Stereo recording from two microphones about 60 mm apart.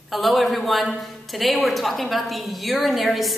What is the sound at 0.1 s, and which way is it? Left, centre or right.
A man's voice, centre.